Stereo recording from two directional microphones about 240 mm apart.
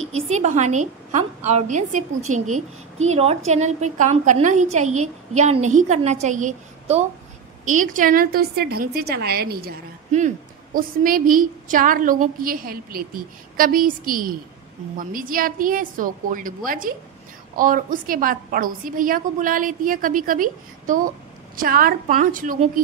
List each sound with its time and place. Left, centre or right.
0.4 s a woman's voice: right